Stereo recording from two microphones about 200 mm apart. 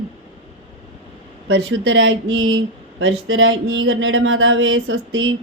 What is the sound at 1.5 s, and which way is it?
Speech, 70° right (ahead or behind).